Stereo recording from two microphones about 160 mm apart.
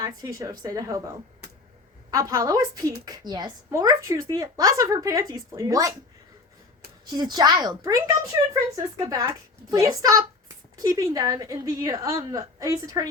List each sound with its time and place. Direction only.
0.0 s a woman's voice: 20° right (ahead or behind)
7.0 s a woman's voice: 25° right (ahead or behind)